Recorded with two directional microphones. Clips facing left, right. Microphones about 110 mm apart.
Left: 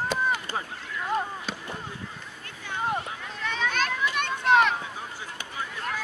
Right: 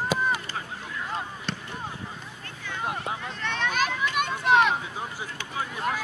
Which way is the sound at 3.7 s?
5° right (ahead or behind).